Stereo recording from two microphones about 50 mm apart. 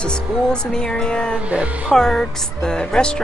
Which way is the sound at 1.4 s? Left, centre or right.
Right.